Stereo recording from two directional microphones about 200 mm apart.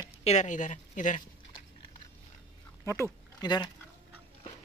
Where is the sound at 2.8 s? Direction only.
15° left (ahead or behind).